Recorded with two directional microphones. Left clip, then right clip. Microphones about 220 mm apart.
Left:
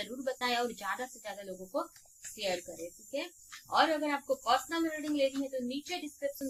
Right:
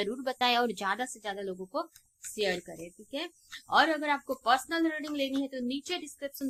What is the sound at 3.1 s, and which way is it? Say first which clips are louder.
Speech: right 2 dB; 45° right (ahead or behind).